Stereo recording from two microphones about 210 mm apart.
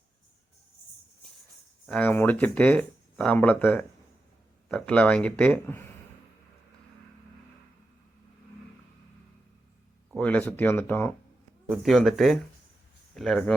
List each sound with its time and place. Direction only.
1.9 s speech: 10° left (ahead or behind)
10.2 s speech: 5° left (ahead or behind)